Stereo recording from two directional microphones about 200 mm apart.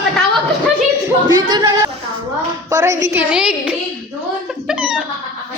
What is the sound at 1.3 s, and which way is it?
A woman's voice, 20° right (ahead or behind).